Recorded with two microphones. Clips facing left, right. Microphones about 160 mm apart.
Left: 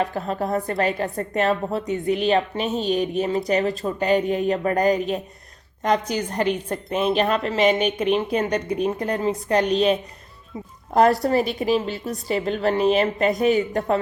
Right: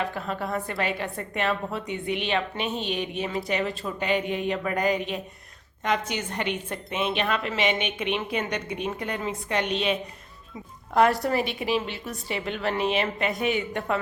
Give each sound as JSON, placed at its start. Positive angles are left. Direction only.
{"t": 0.0, "sound": "a woman's voice", "side_deg": 40}